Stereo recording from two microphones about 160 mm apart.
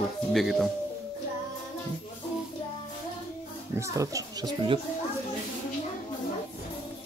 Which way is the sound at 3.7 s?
20° right (ahead or behind).